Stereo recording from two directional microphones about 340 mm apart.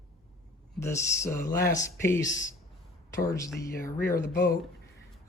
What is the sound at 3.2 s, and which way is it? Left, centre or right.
Speech, centre.